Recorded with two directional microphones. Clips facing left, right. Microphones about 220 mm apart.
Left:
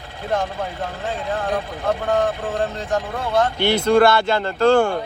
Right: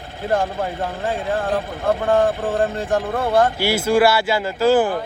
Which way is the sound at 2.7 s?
Centre (ahead or behind).